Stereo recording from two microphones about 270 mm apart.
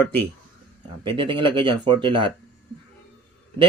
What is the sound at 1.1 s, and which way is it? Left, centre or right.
Speech, centre.